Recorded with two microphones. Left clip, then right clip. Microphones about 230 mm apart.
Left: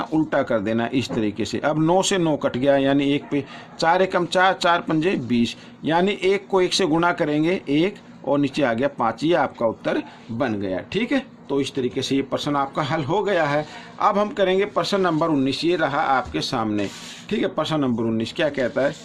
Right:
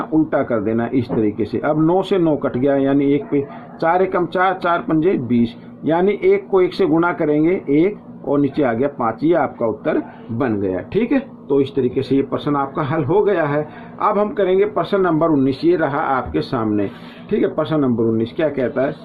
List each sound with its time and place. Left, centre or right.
0.0 s speech: left